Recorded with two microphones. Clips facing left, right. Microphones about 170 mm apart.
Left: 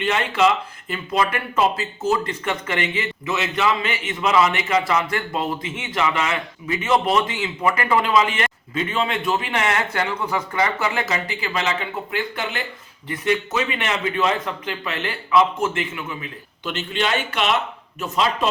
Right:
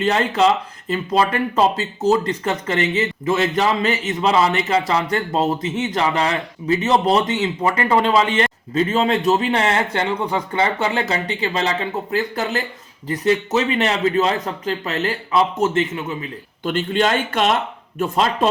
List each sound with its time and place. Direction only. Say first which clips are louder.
0.0 s a man's voice: right 3 dB; 35° right (ahead or behind)
3.0 s a man's voice: right 6 dB; 45° right (ahead or behind)
16.6 s speech: right 5 dB; 45° right (ahead or behind)